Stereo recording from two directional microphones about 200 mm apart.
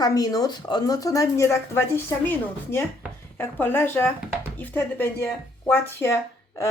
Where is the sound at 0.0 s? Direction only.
20° left (ahead or behind).